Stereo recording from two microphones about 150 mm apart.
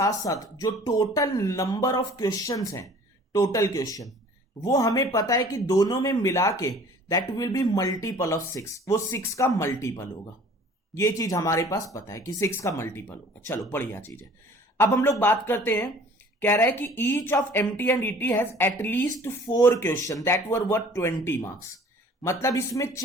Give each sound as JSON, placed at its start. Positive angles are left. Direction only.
{"t": 0.0, "sound": "speech", "side_deg": 25}
{"t": 10.9, "sound": "speech", "side_deg": 25}